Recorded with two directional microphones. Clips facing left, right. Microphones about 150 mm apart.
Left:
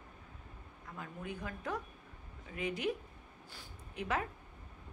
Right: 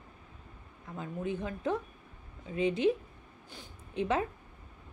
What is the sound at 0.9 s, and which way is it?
A woman's voice, 25° right (ahead or behind).